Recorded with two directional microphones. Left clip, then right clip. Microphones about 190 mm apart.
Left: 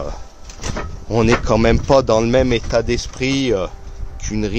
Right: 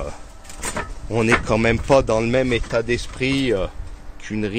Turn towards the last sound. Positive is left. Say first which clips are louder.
# left 3 dB
turn(degrees=5)  # may be behind; listen again after turning